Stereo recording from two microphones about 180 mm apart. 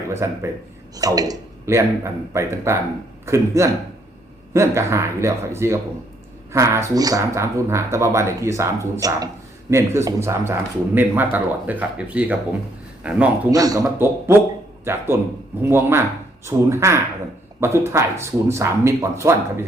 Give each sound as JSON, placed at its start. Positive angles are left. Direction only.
{"t": 0.2, "sound": "speech", "side_deg": -15}
{"t": 13.5, "sound": "speech", "side_deg": -20}